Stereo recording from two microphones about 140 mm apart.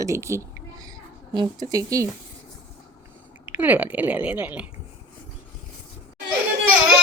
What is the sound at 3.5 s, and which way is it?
Speech, 10° right (ahead or behind).